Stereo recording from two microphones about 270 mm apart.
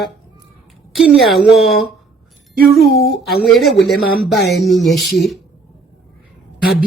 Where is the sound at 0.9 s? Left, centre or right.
Centre.